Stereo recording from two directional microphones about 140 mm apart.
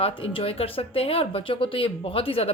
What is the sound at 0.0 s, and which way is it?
Speech, 40° left (ahead or behind).